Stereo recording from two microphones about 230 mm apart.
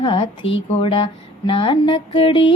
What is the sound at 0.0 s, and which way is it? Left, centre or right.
Mantra, left.